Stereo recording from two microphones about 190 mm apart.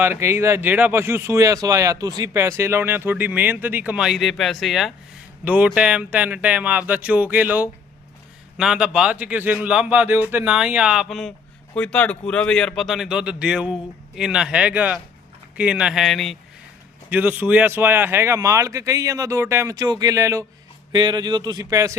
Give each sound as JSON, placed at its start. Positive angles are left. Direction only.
{"t": 0.0, "sound": "a man's voice", "side_deg": -15}